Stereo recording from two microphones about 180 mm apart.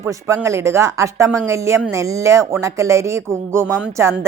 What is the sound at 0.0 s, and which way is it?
A woman's voice, 15° right (ahead or behind).